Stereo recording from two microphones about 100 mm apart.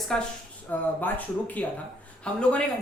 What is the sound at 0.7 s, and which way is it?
Speech, 15° left (ahead or behind).